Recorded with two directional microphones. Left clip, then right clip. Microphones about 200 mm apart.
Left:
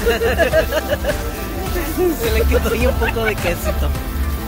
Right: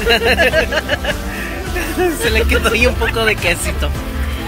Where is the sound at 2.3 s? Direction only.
5° right (ahead or behind).